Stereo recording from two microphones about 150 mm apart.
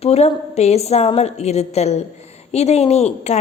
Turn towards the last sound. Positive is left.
turn(degrees=45)  # may be behind; listen again after turning